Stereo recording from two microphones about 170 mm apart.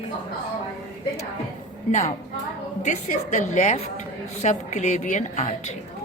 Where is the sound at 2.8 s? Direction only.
45° left (ahead or behind).